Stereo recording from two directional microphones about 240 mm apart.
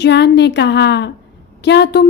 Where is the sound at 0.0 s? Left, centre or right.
Left.